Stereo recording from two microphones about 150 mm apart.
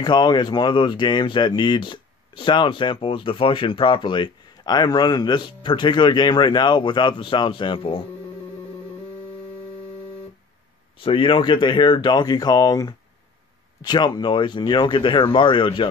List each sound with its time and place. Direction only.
0.0 s speech: 30° left (ahead or behind)
11.0 s speech: 35° left (ahead or behind)